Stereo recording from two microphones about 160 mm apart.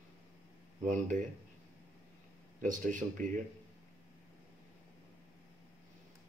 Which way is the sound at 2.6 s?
55° right (ahead or behind).